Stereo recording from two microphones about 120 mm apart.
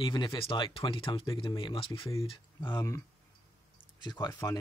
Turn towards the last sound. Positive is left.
turn(degrees=25)  # may be behind; listen again after turning